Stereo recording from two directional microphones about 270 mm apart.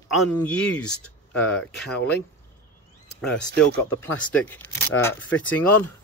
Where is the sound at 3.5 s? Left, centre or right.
Centre.